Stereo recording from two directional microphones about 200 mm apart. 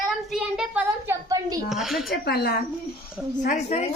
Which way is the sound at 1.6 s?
Centre (ahead or behind).